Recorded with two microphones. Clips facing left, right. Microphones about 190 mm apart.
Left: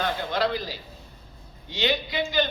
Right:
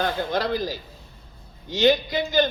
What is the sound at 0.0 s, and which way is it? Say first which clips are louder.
A man's voice: right 1 dB; 45° right (ahead or behind).